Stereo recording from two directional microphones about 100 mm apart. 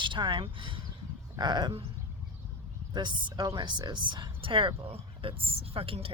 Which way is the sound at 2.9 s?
50° right (ahead or behind).